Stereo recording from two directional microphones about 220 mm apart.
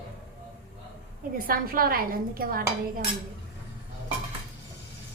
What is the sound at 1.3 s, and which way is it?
A woman's voice, 40° right (ahead or behind).